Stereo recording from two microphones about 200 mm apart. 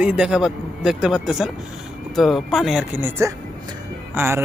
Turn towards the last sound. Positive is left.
turn(degrees=-15)  # may be behind; listen again after turning